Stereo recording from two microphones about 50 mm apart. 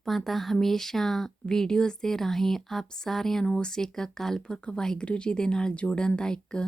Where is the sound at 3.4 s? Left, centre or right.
Left.